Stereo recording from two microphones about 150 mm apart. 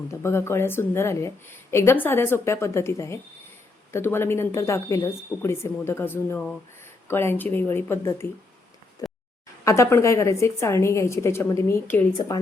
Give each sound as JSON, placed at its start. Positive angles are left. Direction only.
{"t": 0.1, "sound": "speech", "side_deg": 15}
{"t": 9.0, "sound": "a sound", "side_deg": 25}
{"t": 9.6, "sound": "a woman's voice", "side_deg": 20}